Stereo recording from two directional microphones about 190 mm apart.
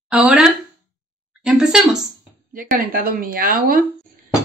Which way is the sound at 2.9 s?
50° right (ahead or behind).